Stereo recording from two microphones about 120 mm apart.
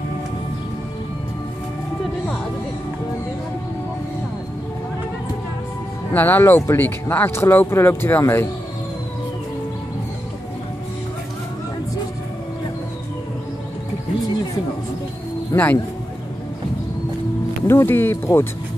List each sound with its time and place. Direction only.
6.1 s speech: 15° left (ahead or behind)
15.5 s speech: 15° left (ahead or behind)
17.6 s speech: 20° left (ahead or behind)